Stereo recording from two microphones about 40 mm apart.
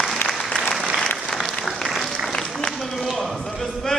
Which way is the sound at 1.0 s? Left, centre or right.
Centre.